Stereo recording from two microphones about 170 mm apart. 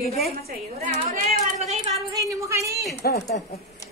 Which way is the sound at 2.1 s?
20° right (ahead or behind).